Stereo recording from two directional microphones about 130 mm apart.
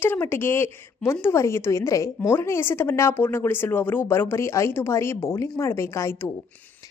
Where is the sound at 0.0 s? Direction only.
15° left (ahead or behind).